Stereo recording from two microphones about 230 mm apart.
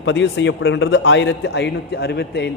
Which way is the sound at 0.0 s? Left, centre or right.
Left.